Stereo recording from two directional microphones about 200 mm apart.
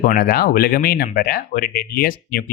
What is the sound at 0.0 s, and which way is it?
Speech, 50° left (ahead or behind).